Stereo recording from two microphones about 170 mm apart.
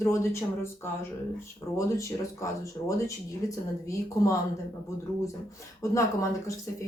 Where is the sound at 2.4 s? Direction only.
20° left (ahead or behind).